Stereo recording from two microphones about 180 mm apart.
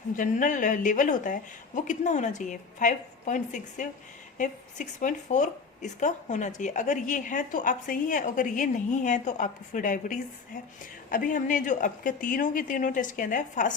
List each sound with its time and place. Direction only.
0.2 s a woman's voice: 45° left (ahead or behind)